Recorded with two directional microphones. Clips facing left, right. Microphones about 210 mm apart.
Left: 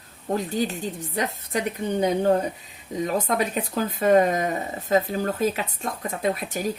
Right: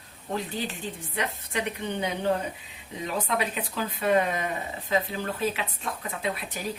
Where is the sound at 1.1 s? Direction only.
40° left (ahead or behind).